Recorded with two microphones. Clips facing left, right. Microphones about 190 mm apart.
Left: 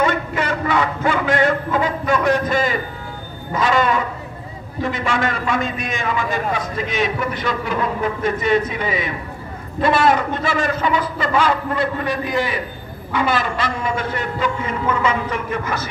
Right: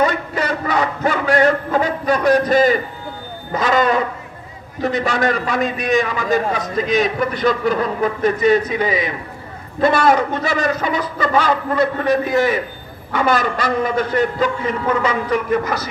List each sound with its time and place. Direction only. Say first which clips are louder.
0.0 s a man's voice: right 1 dB; 40° right (ahead or behind)